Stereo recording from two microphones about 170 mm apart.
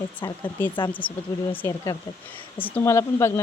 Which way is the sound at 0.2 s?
25° left (ahead or behind).